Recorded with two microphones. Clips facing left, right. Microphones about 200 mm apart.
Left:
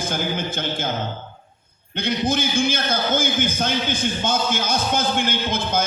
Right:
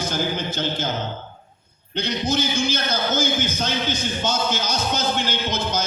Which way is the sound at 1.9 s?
55° left (ahead or behind).